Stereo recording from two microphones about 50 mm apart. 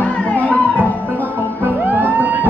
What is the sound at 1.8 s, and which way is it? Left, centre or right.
Music, right.